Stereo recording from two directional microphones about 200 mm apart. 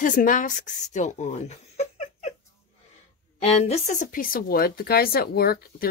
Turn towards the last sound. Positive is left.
turn(degrees=50)  # may be behind; listen again after turning